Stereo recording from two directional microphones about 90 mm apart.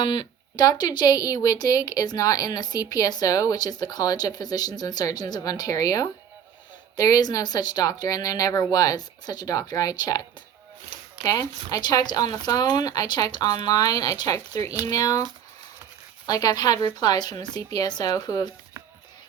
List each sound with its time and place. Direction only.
0.0 s speech: 60° left (ahead or behind); by 15.2 s 40° left (ahead or behind)
16.2 s speech: 45° left (ahead or behind)